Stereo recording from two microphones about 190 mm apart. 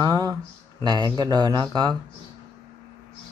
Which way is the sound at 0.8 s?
20° right (ahead or behind).